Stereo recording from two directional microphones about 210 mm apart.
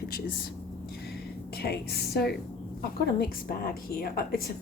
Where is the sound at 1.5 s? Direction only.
50° left (ahead or behind).